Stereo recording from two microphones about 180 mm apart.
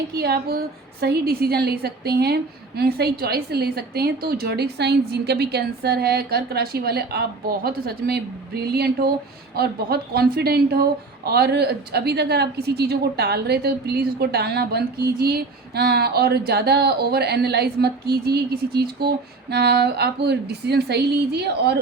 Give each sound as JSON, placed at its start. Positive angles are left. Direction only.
{"t": 0.1, "sound": "a woman's voice", "side_deg": -60}